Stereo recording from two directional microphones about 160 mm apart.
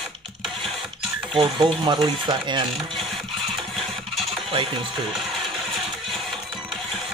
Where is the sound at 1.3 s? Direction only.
30° right (ahead or behind).